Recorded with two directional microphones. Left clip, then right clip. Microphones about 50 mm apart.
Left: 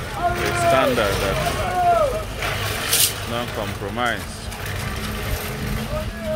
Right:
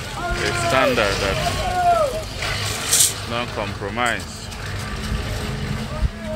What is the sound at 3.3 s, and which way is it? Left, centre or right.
Speech, left.